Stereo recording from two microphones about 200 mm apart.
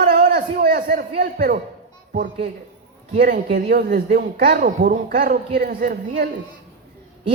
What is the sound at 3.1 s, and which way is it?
Speech, 50° right (ahead or behind).